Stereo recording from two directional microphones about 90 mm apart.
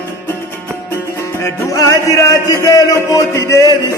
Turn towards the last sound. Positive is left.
turn(degrees=35)  # may be behind; listen again after turning